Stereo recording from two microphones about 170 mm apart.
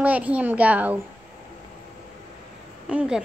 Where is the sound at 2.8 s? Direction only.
5° right (ahead or behind).